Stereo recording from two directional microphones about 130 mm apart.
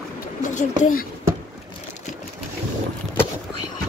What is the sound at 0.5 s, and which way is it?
Speech, 85° left.